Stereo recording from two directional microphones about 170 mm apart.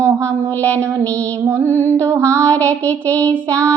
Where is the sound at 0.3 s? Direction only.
10° left (ahead or behind).